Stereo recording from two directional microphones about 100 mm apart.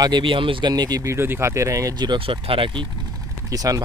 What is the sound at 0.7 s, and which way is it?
Speech, 40° right (ahead or behind).